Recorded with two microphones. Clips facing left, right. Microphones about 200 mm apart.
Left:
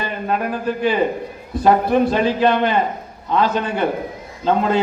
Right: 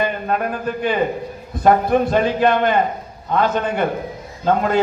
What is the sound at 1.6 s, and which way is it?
A man's voice, 50° right (ahead or behind).